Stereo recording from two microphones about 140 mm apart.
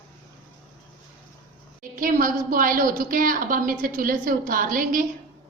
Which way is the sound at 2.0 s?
75° right (ahead or behind).